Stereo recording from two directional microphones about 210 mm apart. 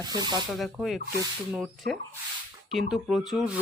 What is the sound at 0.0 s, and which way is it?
Rub, 20° right (ahead or behind).